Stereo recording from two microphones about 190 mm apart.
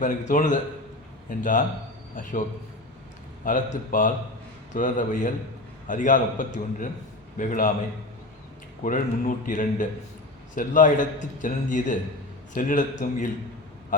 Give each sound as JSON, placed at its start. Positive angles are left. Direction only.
{"t": 0.0, "sound": "a man's voice", "side_deg": 45}
{"t": 3.4, "sound": "a man's voice", "side_deg": 45}
{"t": 8.8, "sound": "a man's voice", "side_deg": 45}